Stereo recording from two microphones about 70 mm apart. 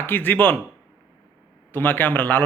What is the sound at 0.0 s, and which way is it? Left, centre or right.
Speech, left.